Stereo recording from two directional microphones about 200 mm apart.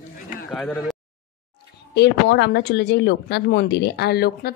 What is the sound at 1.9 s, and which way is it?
Speech, 60° left (ahead or behind).